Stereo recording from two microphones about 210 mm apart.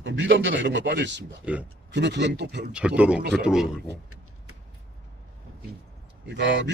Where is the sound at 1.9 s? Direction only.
55° right (ahead or behind).